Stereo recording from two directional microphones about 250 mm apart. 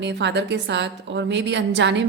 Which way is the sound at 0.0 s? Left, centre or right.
Right.